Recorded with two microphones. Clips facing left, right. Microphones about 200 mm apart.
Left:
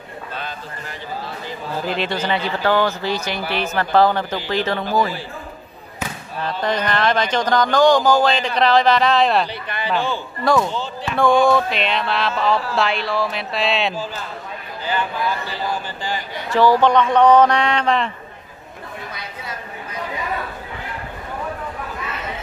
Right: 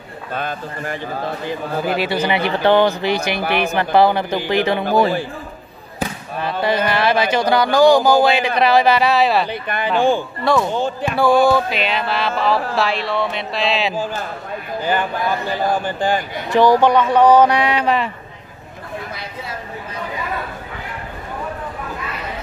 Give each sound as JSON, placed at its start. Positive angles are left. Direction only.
{"t": 0.3, "sound": "speech", "side_deg": -50}
{"t": 2.0, "sound": "speech", "side_deg": -10}
{"t": 6.6, "sound": "speech", "side_deg": -5}
{"t": 9.5, "sound": "speech", "side_deg": -50}
{"t": 10.4, "sound": "music", "side_deg": 0}
{"t": 10.7, "sound": "speech", "side_deg": -50}
{"t": 11.1, "sound": "music", "side_deg": -5}
{"t": 14.9, "sound": "speech", "side_deg": -50}
{"t": 16.4, "sound": "speech", "side_deg": -15}